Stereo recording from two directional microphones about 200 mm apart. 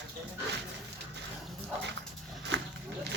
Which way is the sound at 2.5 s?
60° right (ahead or behind).